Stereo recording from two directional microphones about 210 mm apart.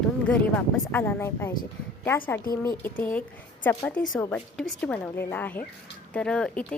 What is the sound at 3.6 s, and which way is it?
A woman's voice, 5° left (ahead or behind).